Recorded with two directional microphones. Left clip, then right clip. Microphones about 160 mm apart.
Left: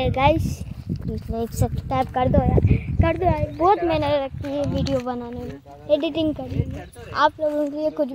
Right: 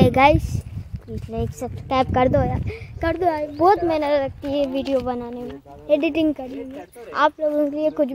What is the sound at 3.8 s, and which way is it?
Speech, centre (ahead or behind).